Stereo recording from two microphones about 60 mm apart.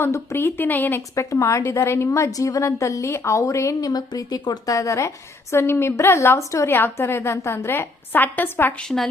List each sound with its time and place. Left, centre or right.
0.0 s speech: left
1.1 s a woman's voice: left
1.7 s a woman's voice: left
3.8 s a woman's voice: left
8.1 s speech: left
8.9 s a woman's voice: centre